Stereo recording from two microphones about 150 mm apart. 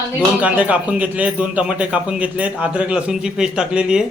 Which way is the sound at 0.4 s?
10° right (ahead or behind).